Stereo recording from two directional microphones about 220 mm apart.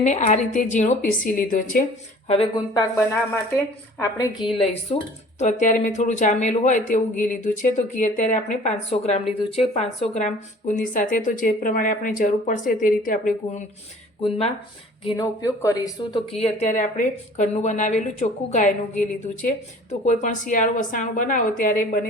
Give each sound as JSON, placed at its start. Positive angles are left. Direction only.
{"t": 0.0, "sound": "a woman's voice", "side_deg": 30}
{"t": 2.2, "sound": "speech", "side_deg": 25}
{"t": 4.5, "sound": "a woman's voice", "side_deg": 25}
{"t": 16.4, "sound": "a woman's voice", "side_deg": 30}